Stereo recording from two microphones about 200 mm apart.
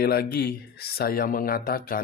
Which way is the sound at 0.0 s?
50° left (ahead or behind).